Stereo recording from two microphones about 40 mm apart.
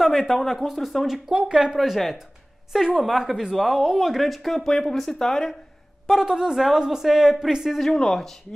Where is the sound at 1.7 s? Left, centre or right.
Centre.